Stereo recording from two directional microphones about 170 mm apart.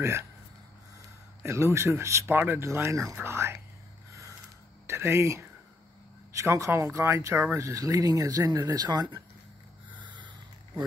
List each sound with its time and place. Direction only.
0.0 s speech: 15° right (ahead or behind)
1.4 s speech: 15° right (ahead or behind)
4.8 s speech: 15° right (ahead or behind)
9.9 s a sound: 25° right (ahead or behind)